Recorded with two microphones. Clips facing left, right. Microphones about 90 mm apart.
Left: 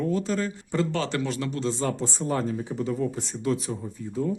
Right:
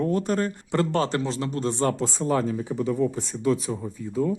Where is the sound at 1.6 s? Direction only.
60° right (ahead or behind).